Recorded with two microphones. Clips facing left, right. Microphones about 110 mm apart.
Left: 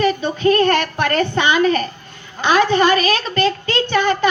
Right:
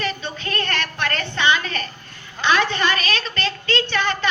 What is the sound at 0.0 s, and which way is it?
Child singing, 40° left (ahead or behind).